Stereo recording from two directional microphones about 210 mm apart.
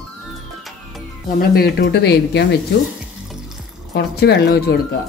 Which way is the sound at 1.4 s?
45° left (ahead or behind).